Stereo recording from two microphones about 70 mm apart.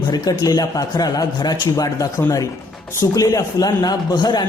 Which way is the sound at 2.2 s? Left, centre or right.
Left.